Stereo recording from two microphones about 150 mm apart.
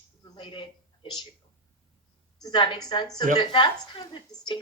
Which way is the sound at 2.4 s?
30° left (ahead or behind).